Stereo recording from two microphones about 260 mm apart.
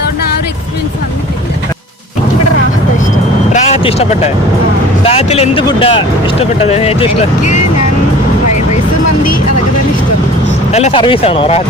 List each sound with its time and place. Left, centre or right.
3.5 s vehicle: left
5.0 s speech: left
10.7 s speech: left